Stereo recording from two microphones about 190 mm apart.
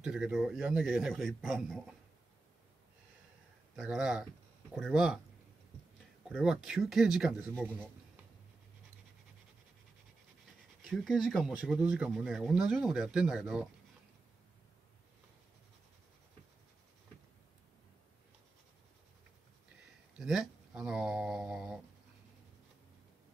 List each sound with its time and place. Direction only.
0.0 s speech: 5° right (ahead or behind)
3.7 s speech: 5° right (ahead or behind)
6.2 s speech: 5° right (ahead or behind)
10.9 s speech: centre (ahead or behind)
20.2 s speech: 5° right (ahead or behind)